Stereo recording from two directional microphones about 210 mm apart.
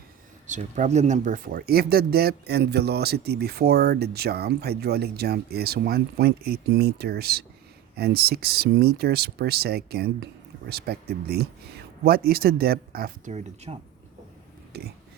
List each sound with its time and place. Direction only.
0.4 s speech: 35° right (ahead or behind)
14.7 s speech: 50° right (ahead or behind)